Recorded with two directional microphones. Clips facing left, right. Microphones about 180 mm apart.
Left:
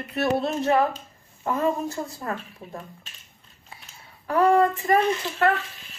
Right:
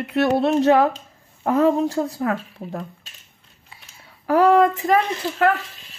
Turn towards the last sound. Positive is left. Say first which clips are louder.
# right 2 dB
turn(degrees=-85)